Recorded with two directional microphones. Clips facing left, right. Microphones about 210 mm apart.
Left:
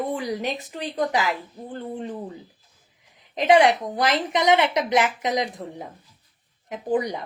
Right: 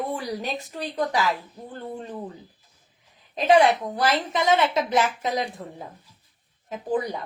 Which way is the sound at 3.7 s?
15° left (ahead or behind).